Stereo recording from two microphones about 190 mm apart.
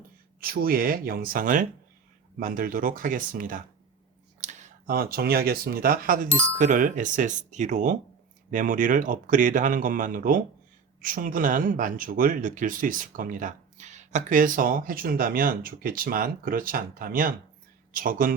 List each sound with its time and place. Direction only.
0.3 s speech: 50° right (ahead or behind)